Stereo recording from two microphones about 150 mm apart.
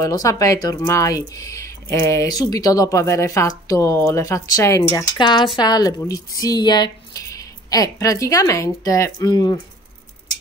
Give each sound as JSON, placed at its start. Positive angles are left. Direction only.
{"t": 0.0, "sound": "speech", "side_deg": 25}